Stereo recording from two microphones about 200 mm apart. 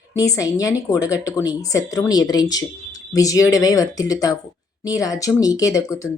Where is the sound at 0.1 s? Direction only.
15° left (ahead or behind).